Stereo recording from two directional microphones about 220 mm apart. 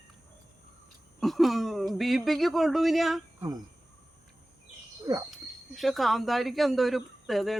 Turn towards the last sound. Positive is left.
turn(degrees=0)  # may be behind; listen again after turning